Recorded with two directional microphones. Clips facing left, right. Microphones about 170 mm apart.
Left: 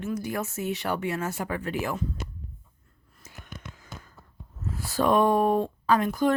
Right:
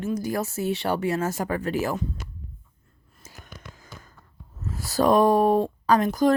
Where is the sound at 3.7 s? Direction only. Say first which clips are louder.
Left 1 dB; 40° right (ahead or behind).